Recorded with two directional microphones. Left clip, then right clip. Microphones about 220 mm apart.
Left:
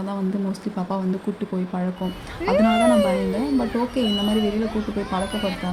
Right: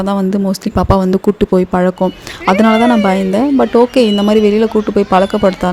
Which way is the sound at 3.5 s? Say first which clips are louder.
Right 17 dB; 50° right (ahead or behind).